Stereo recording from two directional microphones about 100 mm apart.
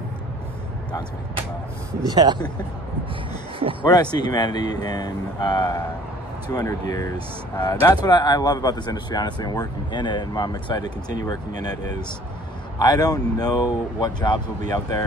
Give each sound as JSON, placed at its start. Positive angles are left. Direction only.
{"t": 2.0, "sound": "speech", "side_deg": -45}
{"t": 3.8, "sound": "speech", "side_deg": 45}